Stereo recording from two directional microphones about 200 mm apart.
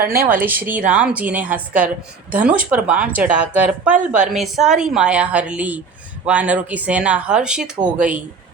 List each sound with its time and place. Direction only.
0.3 s a woman's voice: 10° right (ahead or behind)